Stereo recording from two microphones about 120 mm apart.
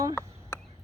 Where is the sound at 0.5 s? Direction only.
20° left (ahead or behind).